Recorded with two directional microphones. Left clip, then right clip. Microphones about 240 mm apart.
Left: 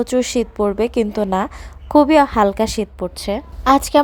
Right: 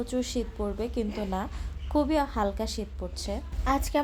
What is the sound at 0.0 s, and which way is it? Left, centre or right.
A woman's voice, left.